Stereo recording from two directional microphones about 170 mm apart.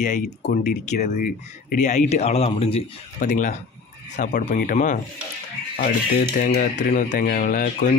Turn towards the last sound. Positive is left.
turn(degrees=55)  # may be behind; listen again after turning